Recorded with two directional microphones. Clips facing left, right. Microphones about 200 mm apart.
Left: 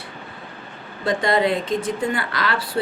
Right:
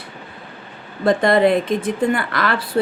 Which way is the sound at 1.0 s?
55° right (ahead or behind).